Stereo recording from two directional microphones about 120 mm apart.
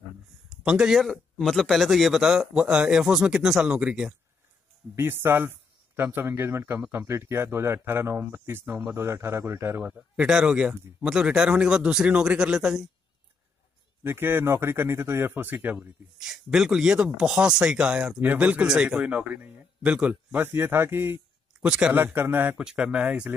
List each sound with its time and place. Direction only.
0.7 s a man's voice: 5° right (ahead or behind)
4.9 s speech: 20° right (ahead or behind)
10.1 s speech: 5° right (ahead or behind)
14.0 s speech: 20° right (ahead or behind)
16.2 s speech: 5° right (ahead or behind)
21.5 s speech: 5° right (ahead or behind)